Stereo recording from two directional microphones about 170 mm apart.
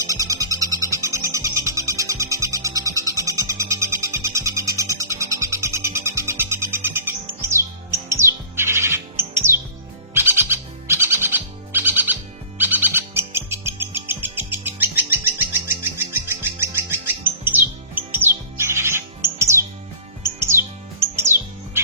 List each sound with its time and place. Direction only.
0.1 s bird: 20° right (ahead or behind)
18.5 s music: 15° right (ahead or behind)
20.2 s bird: 15° right (ahead or behind)